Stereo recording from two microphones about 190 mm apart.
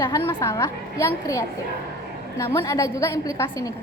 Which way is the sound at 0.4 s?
15° left (ahead or behind).